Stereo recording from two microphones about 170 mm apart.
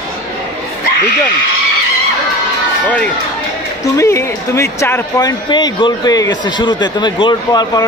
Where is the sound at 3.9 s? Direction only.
15° left (ahead or behind).